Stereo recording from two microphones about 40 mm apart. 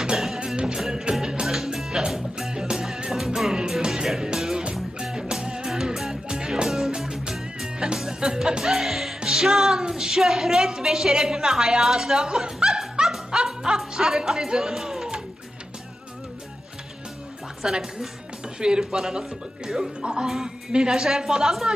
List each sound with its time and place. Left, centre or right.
0.3 s music: right
0.8 s a woman's voice: centre
1.1 s music: centre
4.4 s music: centre
4.6 s music: right
6.7 s music: centre
7.9 s music: centre
9.3 s a woman's voice: centre
13.0 s music: centre
14.2 s speech: centre
17.6 s a woman's voice: centre